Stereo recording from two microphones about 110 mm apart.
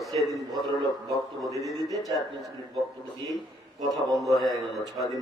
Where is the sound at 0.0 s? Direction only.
Centre (ahead or behind).